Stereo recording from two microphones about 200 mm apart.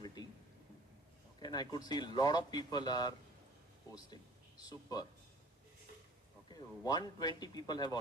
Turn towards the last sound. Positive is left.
turn(degrees=20)  # may be behind; listen again after turning